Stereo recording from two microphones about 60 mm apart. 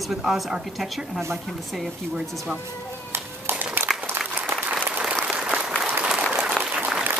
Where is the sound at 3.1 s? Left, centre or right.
Right.